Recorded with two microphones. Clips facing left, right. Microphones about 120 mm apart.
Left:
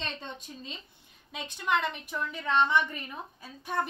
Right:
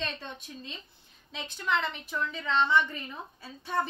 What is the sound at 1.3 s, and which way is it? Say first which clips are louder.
A woman's voice: left 1 dB; 15° left (ahead or behind).